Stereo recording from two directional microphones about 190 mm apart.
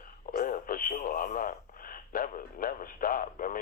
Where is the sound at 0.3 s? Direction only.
45° left (ahead or behind).